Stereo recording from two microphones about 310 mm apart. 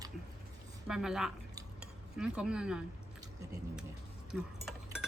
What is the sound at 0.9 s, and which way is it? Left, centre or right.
Cutlery, centre.